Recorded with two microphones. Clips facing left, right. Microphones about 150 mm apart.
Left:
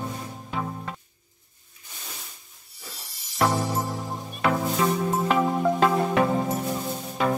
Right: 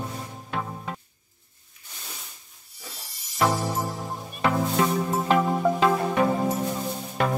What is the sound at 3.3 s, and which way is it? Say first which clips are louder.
Music: even; centre (ahead or behind).